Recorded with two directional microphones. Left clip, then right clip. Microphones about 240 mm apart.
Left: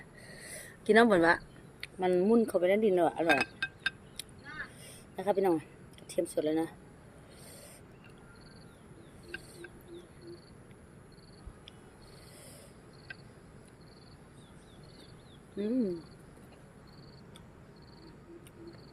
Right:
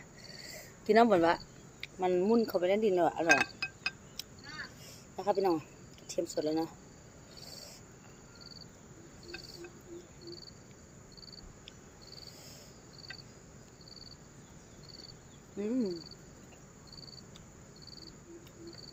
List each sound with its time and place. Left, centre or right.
0.9 s speech: centre
4.2 s crow: centre
5.1 s speech: centre
15.5 s speech: centre